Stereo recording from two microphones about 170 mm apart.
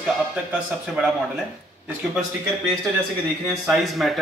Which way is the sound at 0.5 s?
5° right (ahead or behind).